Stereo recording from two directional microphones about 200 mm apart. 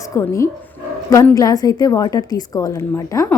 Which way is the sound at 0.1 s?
15° left (ahead or behind).